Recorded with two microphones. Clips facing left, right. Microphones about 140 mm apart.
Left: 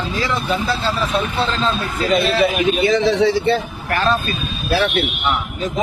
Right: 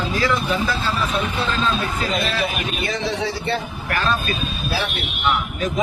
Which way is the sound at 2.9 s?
90° left.